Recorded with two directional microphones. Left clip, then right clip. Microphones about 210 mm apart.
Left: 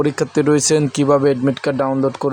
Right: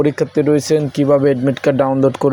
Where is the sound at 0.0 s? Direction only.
Centre (ahead or behind).